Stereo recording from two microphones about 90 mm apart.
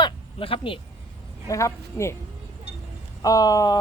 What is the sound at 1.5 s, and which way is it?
Speech, 35° left (ahead or behind).